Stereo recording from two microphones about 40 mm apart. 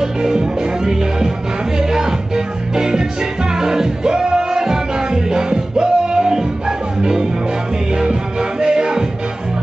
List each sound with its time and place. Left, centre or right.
0.0 s music: centre